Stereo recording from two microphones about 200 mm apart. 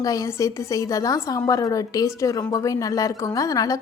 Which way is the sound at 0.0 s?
15° left (ahead or behind).